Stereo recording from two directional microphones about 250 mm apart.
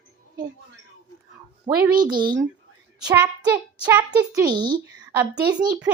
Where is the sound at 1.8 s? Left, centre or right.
Centre.